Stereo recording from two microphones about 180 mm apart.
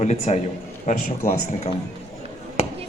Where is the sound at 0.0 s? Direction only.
40° left (ahead or behind).